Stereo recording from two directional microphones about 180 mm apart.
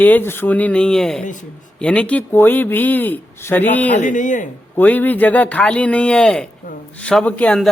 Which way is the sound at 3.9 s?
45° left (ahead or behind).